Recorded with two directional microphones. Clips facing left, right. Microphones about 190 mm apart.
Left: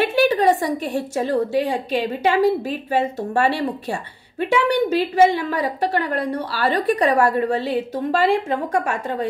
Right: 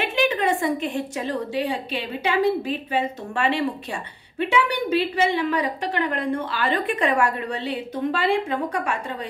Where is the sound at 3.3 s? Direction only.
40° left (ahead or behind).